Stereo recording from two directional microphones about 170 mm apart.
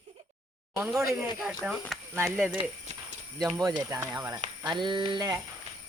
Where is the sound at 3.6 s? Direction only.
20° right (ahead or behind).